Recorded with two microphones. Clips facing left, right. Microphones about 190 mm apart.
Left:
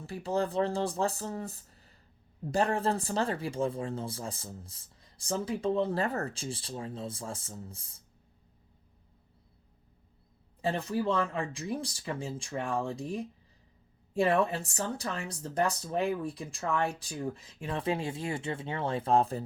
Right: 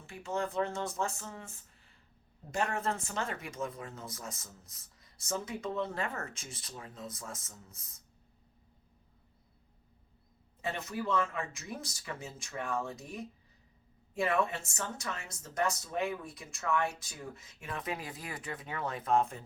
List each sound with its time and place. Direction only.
0.0 s speech: 35° left (ahead or behind)
10.6 s speech: 30° left (ahead or behind)